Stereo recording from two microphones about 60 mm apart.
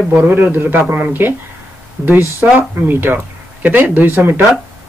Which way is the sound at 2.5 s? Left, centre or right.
Right.